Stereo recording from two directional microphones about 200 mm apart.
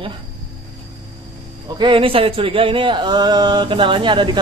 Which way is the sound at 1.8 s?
25° right (ahead or behind).